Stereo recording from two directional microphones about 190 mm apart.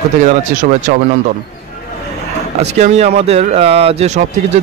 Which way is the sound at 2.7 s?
35° right (ahead or behind).